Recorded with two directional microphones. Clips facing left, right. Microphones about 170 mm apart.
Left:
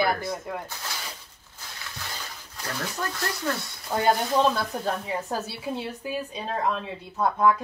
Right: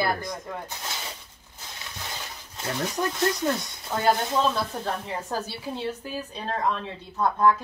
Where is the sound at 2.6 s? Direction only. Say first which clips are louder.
Right 4 dB; 20° right (ahead or behind).